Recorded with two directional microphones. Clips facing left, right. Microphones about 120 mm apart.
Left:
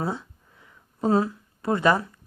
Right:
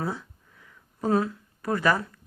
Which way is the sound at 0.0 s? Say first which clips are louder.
Left 2 dB; 25° left (ahead or behind).